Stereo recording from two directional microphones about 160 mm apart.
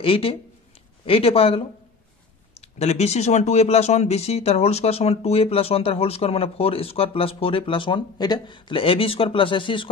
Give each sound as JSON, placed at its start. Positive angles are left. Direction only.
{"t": 0.0, "sound": "speech", "side_deg": 35}